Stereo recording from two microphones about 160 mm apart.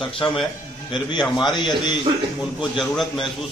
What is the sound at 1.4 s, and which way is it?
Speech, 25° left (ahead or behind).